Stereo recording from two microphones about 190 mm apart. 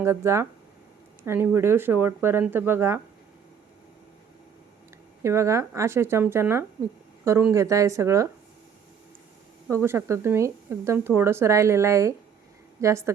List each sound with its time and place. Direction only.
0.0 s speech: 15° right (ahead or behind)
5.2 s speech: 15° right (ahead or behind)
9.6 s speech: 15° right (ahead or behind)